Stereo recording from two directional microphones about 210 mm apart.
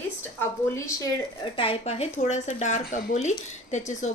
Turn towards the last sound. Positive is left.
turn(degrees=35)  # may be behind; listen again after turning